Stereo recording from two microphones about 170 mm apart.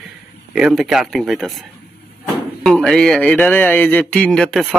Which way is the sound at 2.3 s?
Centre (ahead or behind).